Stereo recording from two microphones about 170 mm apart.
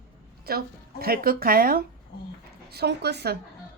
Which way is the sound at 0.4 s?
65° right (ahead or behind).